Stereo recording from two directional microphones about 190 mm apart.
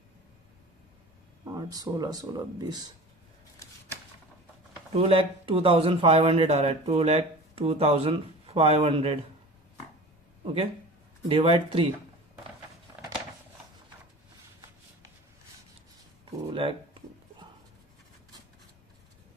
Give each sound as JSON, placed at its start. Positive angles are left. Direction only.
{"t": 1.5, "sound": "speech", "side_deg": -20}
{"t": 4.9, "sound": "speech", "side_deg": -30}
{"t": 10.4, "sound": "speech", "side_deg": -30}
{"t": 16.5, "sound": "a sound", "side_deg": -25}